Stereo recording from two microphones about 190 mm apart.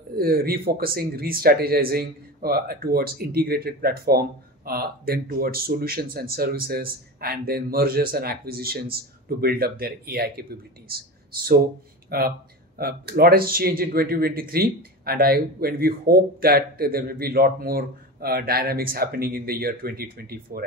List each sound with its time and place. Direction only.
0.2 s speech: 50° right (ahead or behind)
11.4 s speech: 50° right (ahead or behind)